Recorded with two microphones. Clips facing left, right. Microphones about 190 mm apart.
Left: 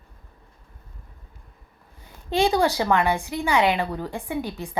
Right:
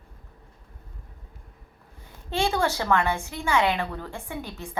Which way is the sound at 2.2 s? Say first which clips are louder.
Left 5 dB; 15° left (ahead or behind).